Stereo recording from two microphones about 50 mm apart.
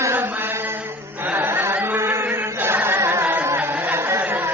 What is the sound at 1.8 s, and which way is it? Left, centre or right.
Chant, right.